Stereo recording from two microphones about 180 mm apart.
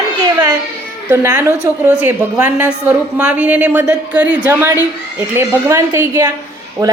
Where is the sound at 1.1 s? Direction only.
15° right (ahead or behind).